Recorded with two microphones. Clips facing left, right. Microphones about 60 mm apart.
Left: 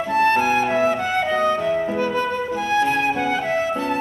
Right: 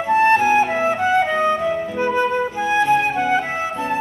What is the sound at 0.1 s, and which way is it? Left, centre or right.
Music, right.